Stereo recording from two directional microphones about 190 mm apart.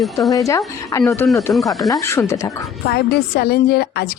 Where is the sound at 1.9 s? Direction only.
15° left (ahead or behind).